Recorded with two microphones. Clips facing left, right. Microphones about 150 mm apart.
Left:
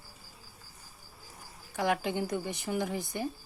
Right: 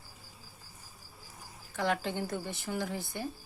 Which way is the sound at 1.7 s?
15° left (ahead or behind).